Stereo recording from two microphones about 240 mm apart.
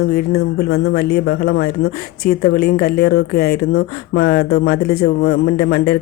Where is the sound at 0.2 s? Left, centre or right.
Left.